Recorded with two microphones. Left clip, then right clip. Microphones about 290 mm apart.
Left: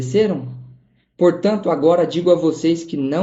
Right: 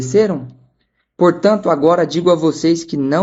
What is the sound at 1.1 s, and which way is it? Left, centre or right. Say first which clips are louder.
Speech: right 3 dB; right.